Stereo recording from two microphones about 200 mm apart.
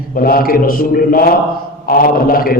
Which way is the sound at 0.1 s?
45° left (ahead or behind).